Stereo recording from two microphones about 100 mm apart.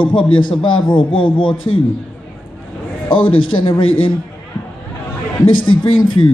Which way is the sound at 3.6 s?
55° left (ahead or behind).